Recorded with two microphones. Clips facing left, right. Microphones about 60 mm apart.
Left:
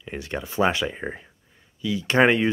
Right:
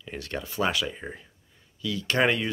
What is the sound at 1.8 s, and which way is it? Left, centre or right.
Speech, centre.